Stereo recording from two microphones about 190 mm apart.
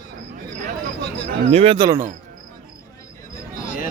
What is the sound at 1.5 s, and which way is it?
Speech, 30° right (ahead or behind).